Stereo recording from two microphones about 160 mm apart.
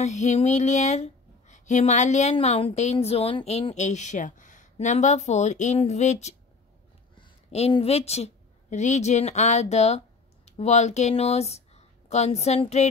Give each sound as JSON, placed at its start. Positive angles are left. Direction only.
{"t": 0.0, "sound": "speech", "side_deg": 45}
{"t": 7.2, "sound": "a woman's voice", "side_deg": 35}